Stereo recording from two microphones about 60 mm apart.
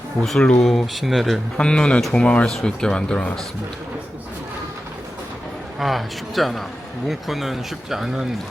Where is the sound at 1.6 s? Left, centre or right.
Centre.